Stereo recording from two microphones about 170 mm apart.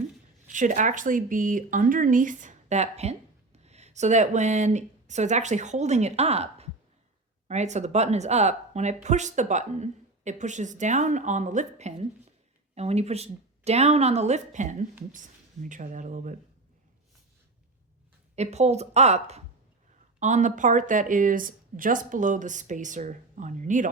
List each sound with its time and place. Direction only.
0.4 s speech: 50° right (ahead or behind)
18.3 s speech: 40° right (ahead or behind)